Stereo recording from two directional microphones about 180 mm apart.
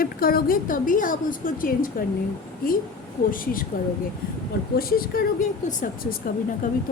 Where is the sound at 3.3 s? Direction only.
50° left (ahead or behind).